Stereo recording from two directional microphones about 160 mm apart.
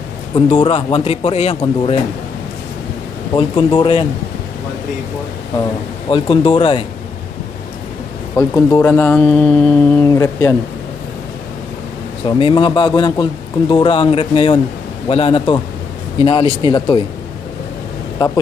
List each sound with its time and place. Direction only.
0.5 s a man's voice: 40° left (ahead or behind)
3.3 s a man's voice: 30° left (ahead or behind)
5.6 s a man's voice: 30° left (ahead or behind)
8.4 s speech: 15° left (ahead or behind)
12.3 s a man's voice: 35° left (ahead or behind)